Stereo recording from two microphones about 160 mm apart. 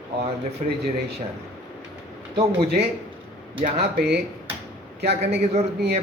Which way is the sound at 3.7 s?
90° right.